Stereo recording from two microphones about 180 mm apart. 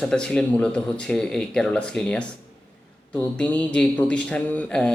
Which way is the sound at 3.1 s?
10° left (ahead or behind).